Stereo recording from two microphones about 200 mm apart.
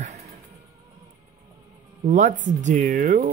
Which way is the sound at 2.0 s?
40° right (ahead or behind).